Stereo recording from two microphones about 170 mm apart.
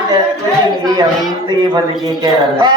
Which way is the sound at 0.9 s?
25° right (ahead or behind).